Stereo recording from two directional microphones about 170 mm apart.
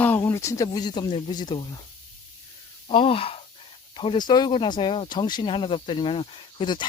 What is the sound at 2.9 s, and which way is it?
Speech, 30° left (ahead or behind).